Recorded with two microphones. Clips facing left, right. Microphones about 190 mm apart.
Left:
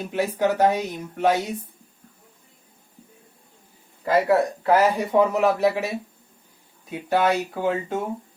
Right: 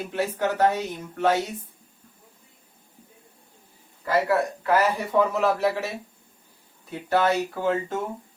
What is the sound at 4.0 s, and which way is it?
Speech, 20° left (ahead or behind).